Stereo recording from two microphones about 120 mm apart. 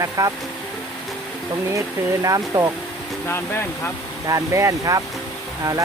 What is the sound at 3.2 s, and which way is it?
Speech, 20° left (ahead or behind).